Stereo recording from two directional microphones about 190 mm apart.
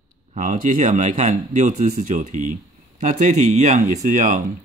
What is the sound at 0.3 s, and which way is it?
Speech, 40° right (ahead or behind).